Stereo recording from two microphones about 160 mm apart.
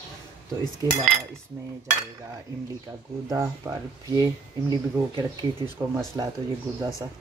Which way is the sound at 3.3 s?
20° right (ahead or behind).